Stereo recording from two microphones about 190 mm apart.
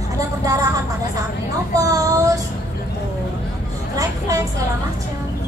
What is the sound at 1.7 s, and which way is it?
Child singing, 15° right (ahead or behind).